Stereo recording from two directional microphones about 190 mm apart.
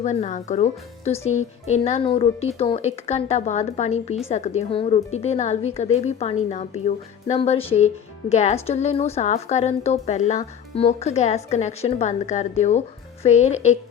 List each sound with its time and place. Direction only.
0.0 s a woman's voice: 35° left (ahead or behind)